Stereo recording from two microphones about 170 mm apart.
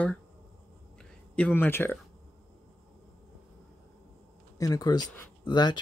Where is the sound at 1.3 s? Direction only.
10° left (ahead or behind).